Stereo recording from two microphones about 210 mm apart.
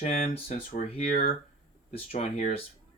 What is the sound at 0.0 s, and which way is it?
Speech, 30° left (ahead or behind).